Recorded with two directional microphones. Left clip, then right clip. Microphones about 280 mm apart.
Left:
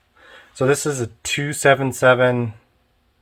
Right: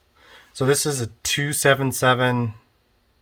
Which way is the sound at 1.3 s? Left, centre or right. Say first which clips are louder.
Left 3 dB; right.